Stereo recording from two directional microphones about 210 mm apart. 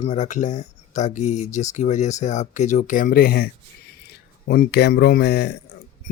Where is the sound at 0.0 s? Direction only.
30° left (ahead or behind).